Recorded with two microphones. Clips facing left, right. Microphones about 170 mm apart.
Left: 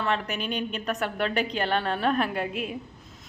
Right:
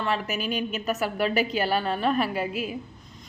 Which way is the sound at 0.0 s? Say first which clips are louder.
Right 1 dB; 5° right (ahead or behind).